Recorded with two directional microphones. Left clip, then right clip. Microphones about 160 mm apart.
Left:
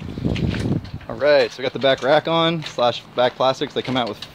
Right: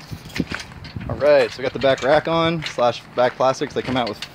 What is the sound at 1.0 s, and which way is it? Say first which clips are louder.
Speech: right 1 dB; 5° right (ahead or behind).